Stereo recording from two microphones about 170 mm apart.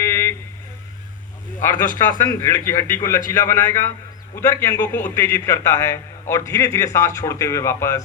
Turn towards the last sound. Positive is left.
turn(degrees=15)  # may be behind; listen again after turning